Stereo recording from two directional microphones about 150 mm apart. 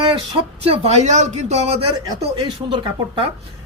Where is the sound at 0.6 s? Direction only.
45° right (ahead or behind).